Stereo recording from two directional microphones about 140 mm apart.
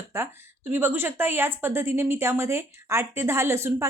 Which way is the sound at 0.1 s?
15° right (ahead or behind).